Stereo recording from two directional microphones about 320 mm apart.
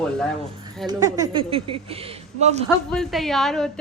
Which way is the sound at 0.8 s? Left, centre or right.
Centre.